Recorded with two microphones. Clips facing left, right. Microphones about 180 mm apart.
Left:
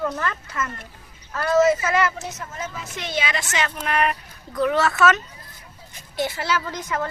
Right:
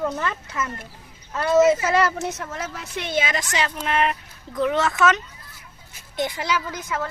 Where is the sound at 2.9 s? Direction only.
55° right (ahead or behind).